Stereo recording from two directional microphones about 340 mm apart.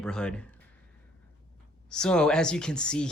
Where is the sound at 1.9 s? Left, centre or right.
Centre.